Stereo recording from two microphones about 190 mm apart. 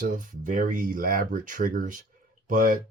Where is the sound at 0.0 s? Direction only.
45° right (ahead or behind).